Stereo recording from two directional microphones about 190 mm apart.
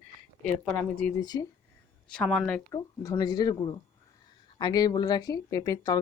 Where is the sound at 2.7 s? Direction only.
20° left (ahead or behind).